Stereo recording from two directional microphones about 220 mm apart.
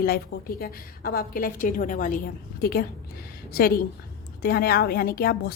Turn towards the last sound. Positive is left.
turn(degrees=45)  # may be behind; listen again after turning